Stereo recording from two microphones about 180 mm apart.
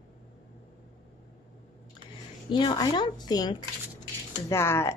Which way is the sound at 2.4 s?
25° left (ahead or behind).